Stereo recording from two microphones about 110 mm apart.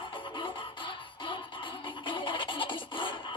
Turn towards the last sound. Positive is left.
turn(degrees=50)  # may be behind; listen again after turning